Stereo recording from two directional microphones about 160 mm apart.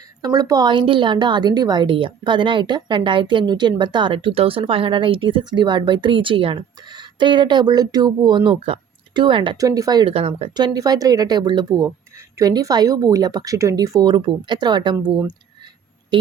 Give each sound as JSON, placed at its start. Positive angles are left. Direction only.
{"t": 0.2, "sound": "a woman's voice", "side_deg": -20}
{"t": 10.2, "sound": "speech", "side_deg": -40}
{"t": 10.5, "sound": "a woman's voice", "side_deg": -25}